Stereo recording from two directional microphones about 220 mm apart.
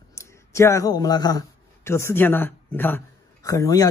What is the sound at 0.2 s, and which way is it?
Speech, 15° left (ahead or behind).